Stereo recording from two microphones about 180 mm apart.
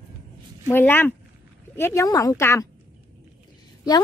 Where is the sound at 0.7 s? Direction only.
10° left (ahead or behind).